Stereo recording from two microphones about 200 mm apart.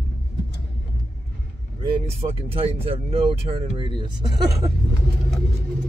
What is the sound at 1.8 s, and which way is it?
Speech, 25° right (ahead or behind).